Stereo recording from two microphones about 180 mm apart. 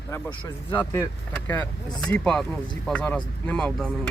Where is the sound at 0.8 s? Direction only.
20° left (ahead or behind).